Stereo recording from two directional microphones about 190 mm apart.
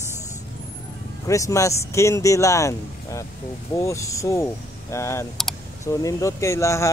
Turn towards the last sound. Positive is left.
turn(degrees=15)  # may be behind; listen again after turning